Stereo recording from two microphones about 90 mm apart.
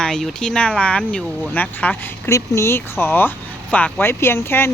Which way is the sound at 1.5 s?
20° left (ahead or behind).